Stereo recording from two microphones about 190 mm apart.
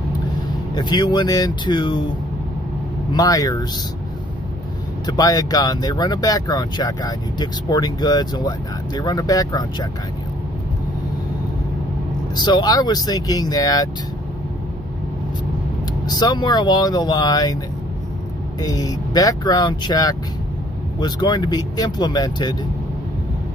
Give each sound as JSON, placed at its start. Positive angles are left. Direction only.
{"t": 0.7, "sound": "speech", "side_deg": 25}
{"t": 3.1, "sound": "speech", "side_deg": 20}
{"t": 5.0, "sound": "speech", "side_deg": 20}
{"t": 12.4, "sound": "speech", "side_deg": 20}
{"t": 16.1, "sound": "speech", "side_deg": 20}
{"t": 18.6, "sound": "speech", "side_deg": 20}